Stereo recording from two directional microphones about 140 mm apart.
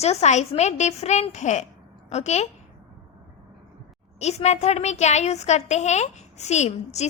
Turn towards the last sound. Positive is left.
turn(degrees=55)  # may be behind; listen again after turning